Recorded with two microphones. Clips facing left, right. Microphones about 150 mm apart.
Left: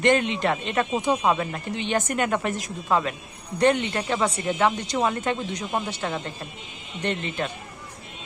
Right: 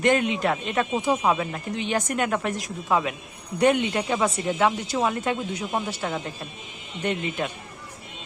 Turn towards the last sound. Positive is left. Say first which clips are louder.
# right 1 dB
turn(degrees=-10)  # may be behind; listen again after turning